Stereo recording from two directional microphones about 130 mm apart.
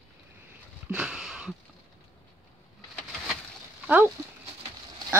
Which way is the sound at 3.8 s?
15° right (ahead or behind).